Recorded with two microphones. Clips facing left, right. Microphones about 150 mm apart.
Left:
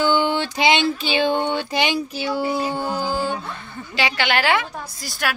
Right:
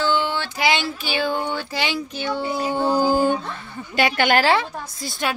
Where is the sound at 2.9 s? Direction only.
45° right (ahead or behind).